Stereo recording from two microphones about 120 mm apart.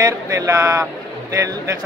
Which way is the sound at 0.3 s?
25° right (ahead or behind).